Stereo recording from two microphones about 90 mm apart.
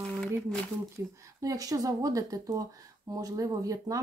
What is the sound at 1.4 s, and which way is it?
Speech, 40° right (ahead or behind).